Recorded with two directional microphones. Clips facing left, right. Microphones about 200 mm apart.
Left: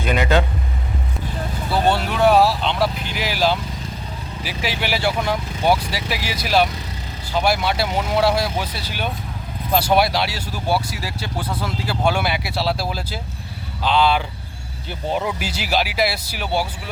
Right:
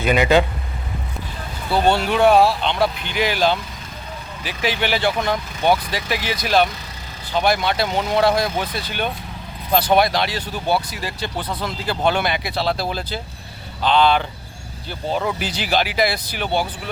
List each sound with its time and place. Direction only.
0.0 s vehicle: 10° right (ahead or behind)
1.7 s speech: centre (ahead or behind)